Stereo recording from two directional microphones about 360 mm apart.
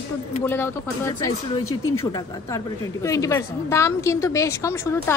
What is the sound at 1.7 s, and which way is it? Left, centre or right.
Speech, left.